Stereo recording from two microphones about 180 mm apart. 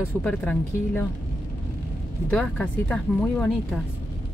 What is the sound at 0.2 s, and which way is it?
Speech, 5° left (ahead or behind).